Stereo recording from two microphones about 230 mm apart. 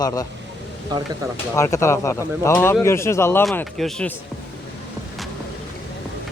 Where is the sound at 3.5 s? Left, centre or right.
Centre.